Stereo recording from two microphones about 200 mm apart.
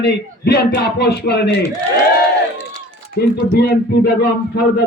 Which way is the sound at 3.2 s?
55° left (ahead or behind).